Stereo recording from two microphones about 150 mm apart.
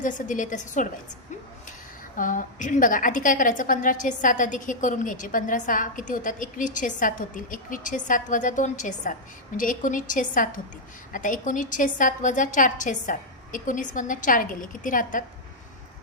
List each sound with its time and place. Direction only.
0.0 s a woman's voice: 60° left (ahead or behind)
2.1 s a woman's voice: 60° left (ahead or behind)